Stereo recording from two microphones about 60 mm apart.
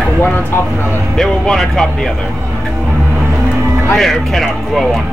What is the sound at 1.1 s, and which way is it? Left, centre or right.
Speech, centre.